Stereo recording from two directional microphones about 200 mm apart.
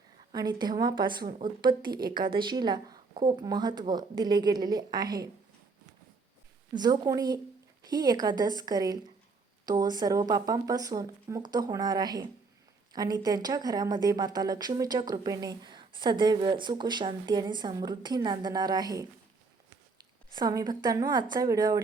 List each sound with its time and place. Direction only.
0.3 s a woman's voice: 20° right (ahead or behind)
6.7 s a woman's voice: 20° right (ahead or behind)
20.3 s a woman's voice: 20° right (ahead or behind)